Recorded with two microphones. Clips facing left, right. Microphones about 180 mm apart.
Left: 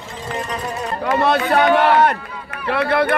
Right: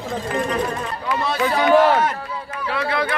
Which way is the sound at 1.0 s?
55° left (ahead or behind).